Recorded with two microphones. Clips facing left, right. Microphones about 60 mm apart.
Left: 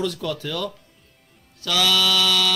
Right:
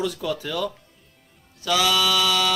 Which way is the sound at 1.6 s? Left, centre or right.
Centre.